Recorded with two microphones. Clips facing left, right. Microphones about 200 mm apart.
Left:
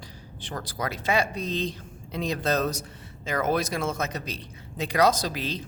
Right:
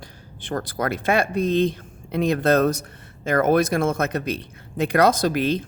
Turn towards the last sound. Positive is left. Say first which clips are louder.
# right 9 dB
turn(degrees=-55)  # may be behind; listen again after turning